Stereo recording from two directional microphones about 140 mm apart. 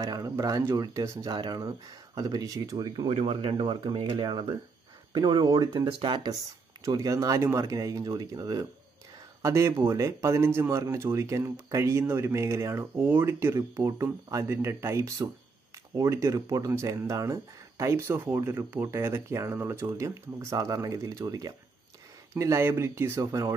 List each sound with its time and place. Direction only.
0.0 s speech: 25° right (ahead or behind)
3.1 s speech: 45° right (ahead or behind); by 23.5 s 25° right (ahead or behind)